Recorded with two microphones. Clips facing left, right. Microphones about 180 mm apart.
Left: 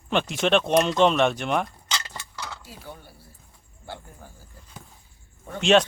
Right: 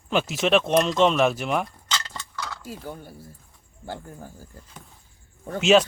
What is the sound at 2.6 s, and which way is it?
Speech, 45° right (ahead or behind).